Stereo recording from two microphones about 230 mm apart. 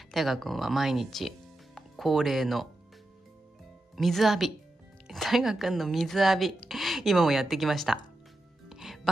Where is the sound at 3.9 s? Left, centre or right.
Centre.